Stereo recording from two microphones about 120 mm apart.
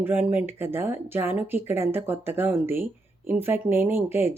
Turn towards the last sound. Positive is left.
turn(degrees=-20)  # may be behind; listen again after turning